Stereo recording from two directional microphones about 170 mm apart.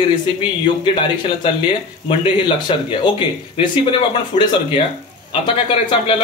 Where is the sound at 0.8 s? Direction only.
30° left (ahead or behind).